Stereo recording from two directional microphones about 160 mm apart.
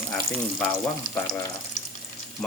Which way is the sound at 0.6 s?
10° left (ahead or behind).